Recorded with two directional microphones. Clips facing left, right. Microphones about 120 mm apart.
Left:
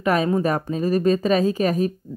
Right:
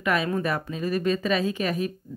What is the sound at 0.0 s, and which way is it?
Speech, 40° left (ahead or behind).